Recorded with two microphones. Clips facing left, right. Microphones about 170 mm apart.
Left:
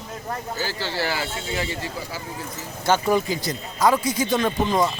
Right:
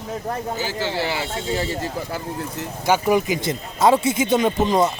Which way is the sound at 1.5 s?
40° right (ahead or behind).